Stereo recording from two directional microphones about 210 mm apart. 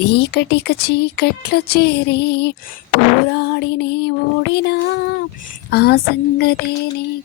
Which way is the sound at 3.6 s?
50° left (ahead or behind).